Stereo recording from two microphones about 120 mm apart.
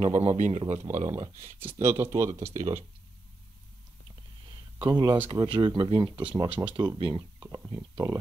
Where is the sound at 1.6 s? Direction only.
20° right (ahead or behind).